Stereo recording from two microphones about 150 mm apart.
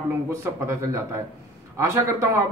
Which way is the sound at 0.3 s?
20° right (ahead or behind).